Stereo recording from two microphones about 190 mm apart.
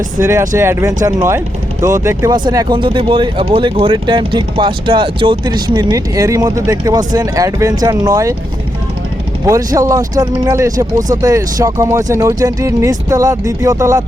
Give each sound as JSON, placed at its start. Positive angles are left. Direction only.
{"t": 0.2, "sound": "speech", "side_deg": -15}
{"t": 9.5, "sound": "speech", "side_deg": -15}